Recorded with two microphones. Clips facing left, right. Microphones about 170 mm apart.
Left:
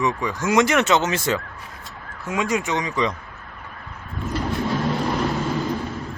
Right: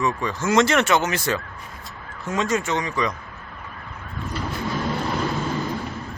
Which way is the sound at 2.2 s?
10° left (ahead or behind).